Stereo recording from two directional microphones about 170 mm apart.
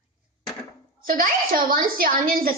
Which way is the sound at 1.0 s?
55° right (ahead or behind).